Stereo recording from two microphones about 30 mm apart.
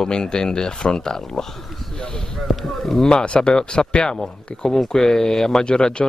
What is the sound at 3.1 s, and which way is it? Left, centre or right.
Speech, left.